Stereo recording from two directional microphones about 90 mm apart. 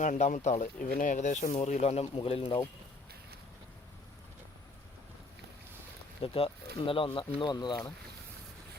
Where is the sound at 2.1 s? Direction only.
85° left.